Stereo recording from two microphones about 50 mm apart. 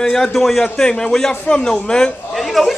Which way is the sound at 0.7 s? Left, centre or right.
Centre.